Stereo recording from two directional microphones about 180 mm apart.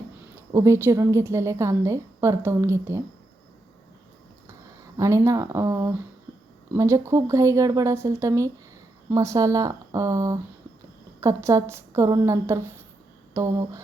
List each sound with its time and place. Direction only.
0.3 s a woman's voice: 15° right (ahead or behind)
4.9 s a woman's voice: 15° right (ahead or behind)